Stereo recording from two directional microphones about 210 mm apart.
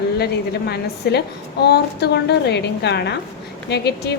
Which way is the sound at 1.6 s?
50° left (ahead or behind).